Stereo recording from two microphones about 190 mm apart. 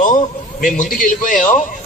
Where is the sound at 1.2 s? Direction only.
45° left (ahead or behind).